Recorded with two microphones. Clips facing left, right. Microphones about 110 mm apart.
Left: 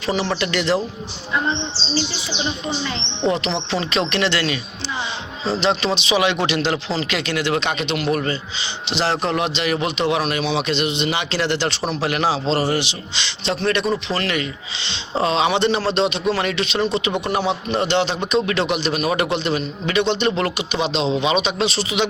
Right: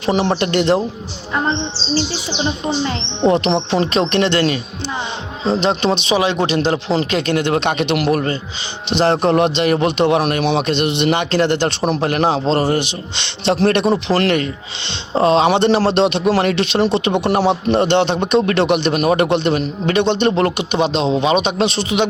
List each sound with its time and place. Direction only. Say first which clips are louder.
0.0 s a man's voice: right 5 dB; 55° right (ahead or behind)
2.8 s a man's voice: right 5 dB; 50° right (ahead or behind); by 8.1 s 65° right (ahead or behind)
8.1 s a man's voice: right 3 dB; 45° right (ahead or behind); by 14.3 s 70° right (ahead or behind)
14.3 s a man's voice: right 5 dB; 50° right (ahead or behind)
15.9 s music: right 5 dB; 60° right (ahead or behind)
16.4 s a man's voice: right 5 dB; 50° right (ahead or behind)
16.8 s music: right 4 dB; 65° right (ahead or behind)
17.3 s a man's voice: right 6 dB; 50° right (ahead or behind)